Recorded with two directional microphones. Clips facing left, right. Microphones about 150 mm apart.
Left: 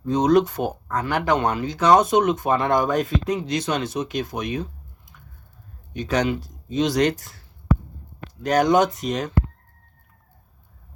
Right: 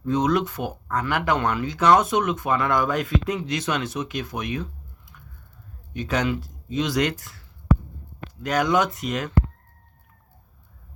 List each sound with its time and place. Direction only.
0.1 s speech: 40° left (ahead or behind)
6.2 s speech: 30° left (ahead or behind)